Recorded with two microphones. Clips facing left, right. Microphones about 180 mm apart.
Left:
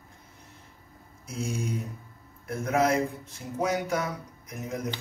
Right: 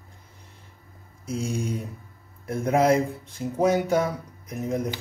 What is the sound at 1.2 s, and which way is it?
Speech, 30° right (ahead or behind).